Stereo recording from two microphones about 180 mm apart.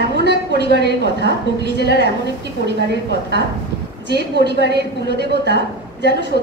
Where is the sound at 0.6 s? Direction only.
65° left (ahead or behind).